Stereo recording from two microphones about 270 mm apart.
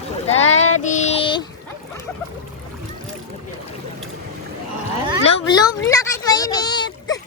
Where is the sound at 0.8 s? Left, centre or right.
Left.